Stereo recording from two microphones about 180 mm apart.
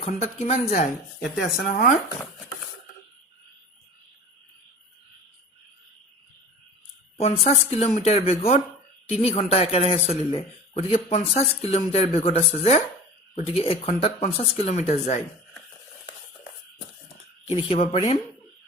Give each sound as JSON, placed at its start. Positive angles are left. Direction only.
{"t": 0.0, "sound": "speech", "side_deg": 35}
{"t": 1.5, "sound": "speech", "side_deg": 55}
{"t": 7.2, "sound": "speech", "side_deg": 35}
{"t": 17.5, "sound": "speech", "side_deg": 30}